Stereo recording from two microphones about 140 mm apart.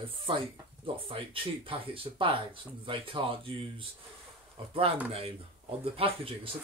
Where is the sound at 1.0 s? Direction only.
40° right (ahead or behind).